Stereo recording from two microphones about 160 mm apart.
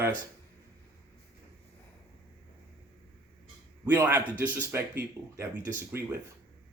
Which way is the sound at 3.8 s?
10° right (ahead or behind).